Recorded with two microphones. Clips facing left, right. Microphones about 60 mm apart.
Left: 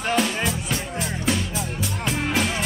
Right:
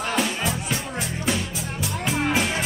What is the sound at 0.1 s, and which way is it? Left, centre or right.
Music, centre.